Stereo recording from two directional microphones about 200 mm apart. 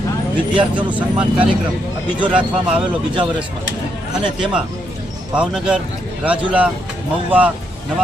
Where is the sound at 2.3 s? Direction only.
5° right (ahead or behind).